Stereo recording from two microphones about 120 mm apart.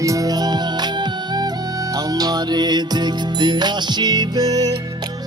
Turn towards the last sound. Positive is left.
turn(degrees=-30)  # may be behind; listen again after turning